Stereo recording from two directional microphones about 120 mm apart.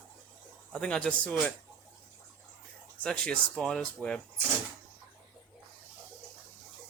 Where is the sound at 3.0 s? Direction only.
10° left (ahead or behind).